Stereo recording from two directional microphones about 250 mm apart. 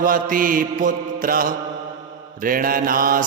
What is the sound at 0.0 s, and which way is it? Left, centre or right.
Mantra, right.